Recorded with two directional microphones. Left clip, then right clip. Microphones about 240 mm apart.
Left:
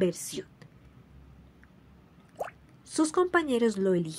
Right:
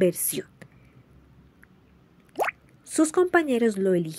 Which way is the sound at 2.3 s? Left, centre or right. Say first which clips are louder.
Right 11 dB; right.